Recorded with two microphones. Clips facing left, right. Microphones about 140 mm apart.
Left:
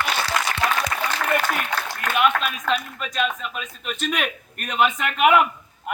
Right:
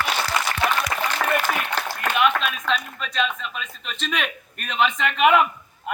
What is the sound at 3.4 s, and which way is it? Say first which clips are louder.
A man's voice: left 2 dB; 5° left (ahead or behind).